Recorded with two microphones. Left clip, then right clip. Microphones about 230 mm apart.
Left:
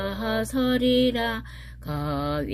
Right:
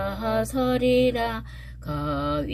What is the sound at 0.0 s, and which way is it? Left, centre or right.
Mantra, left.